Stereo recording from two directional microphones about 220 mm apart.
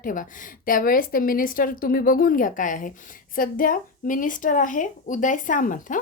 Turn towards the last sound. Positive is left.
turn(degrees=35)  # may be behind; listen again after turning